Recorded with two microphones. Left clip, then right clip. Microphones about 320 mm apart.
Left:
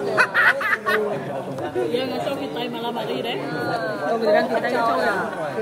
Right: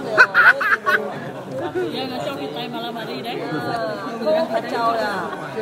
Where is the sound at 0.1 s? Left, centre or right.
Centre.